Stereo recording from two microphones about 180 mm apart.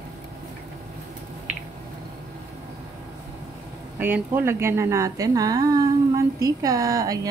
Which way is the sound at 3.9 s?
10° right (ahead or behind).